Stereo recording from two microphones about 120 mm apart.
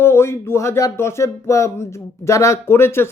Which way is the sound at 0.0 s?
20° left (ahead or behind).